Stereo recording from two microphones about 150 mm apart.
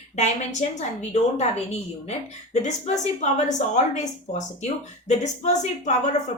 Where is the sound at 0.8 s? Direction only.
50° left (ahead or behind).